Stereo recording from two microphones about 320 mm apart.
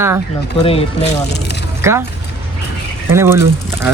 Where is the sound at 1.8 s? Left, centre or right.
Centre.